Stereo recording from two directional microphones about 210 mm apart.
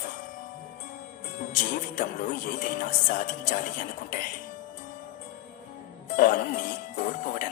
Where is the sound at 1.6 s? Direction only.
35° left (ahead or behind).